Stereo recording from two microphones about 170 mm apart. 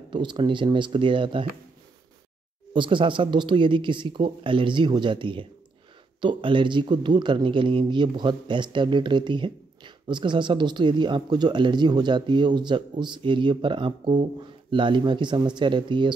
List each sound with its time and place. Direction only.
0.1 s a man's voice: 30° right (ahead or behind)
2.7 s a man's voice: 30° right (ahead or behind)